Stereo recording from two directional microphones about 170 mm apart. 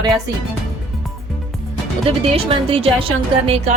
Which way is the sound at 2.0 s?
35° right (ahead or behind).